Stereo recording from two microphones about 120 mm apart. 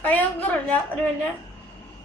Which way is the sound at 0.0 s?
15° left (ahead or behind).